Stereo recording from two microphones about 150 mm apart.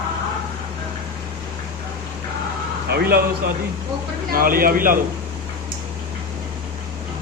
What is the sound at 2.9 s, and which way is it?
Speech, 90° right.